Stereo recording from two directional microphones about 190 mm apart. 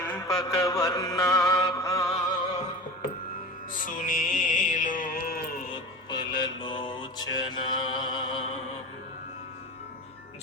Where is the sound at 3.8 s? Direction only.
45° left (ahead or behind).